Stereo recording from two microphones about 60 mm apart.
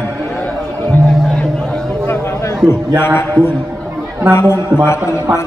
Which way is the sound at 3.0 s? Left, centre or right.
Left.